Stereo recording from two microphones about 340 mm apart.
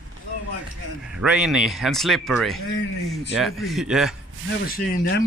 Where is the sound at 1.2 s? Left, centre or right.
Centre.